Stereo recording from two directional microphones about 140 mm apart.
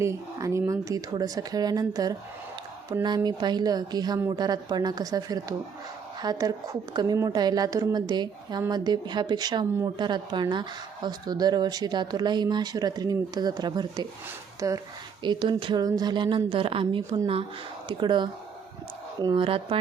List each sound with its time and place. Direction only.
0.0 s speech: 20° right (ahead or behind); by 19.8 s 40° right (ahead or behind)